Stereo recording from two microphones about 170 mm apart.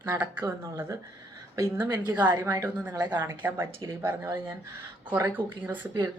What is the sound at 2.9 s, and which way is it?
A woman's voice, 25° right (ahead or behind).